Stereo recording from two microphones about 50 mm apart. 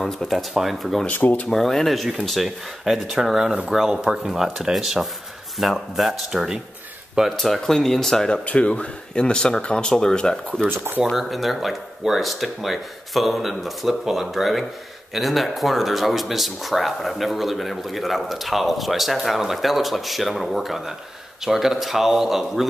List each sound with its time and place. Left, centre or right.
0.0 s speech: centre
1.1 s speech: left
1.5 s speech: centre
8.5 s speech: left
11.1 s speech: centre